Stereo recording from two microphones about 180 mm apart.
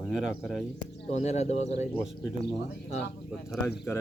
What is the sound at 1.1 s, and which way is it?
Speech, 35° left (ahead or behind).